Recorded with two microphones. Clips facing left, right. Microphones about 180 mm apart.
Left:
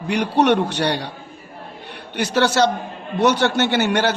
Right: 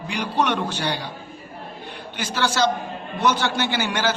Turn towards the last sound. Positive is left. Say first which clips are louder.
# left 6 dB
turn(degrees=60)  # may be behind; listen again after turning